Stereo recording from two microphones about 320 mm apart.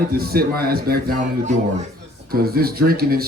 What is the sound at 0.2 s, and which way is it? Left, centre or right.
Speech, right.